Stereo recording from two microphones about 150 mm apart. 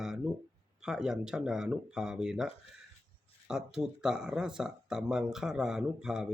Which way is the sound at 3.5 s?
5° right (ahead or behind).